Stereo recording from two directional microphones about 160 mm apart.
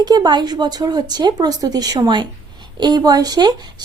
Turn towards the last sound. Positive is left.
turn(degrees=-25)  # may be behind; listen again after turning